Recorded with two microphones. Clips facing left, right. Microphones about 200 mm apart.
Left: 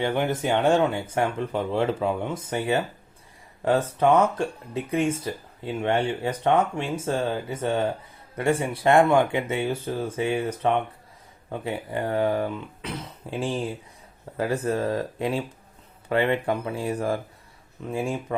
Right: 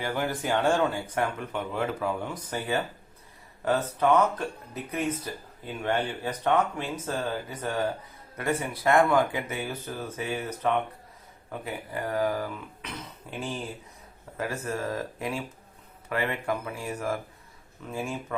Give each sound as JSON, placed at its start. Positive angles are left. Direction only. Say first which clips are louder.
{"t": 0.0, "sound": "speech", "louder": "left 5 dB", "side_deg": 25}
{"t": 14.3, "sound": "speech", "louder": "left 7 dB", "side_deg": 30}